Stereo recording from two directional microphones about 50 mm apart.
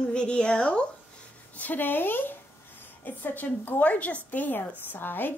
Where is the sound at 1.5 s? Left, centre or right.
Left.